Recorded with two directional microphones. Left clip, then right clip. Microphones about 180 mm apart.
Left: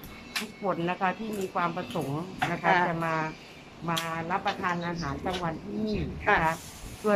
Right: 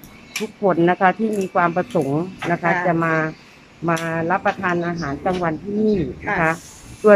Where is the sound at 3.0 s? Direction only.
65° right (ahead or behind).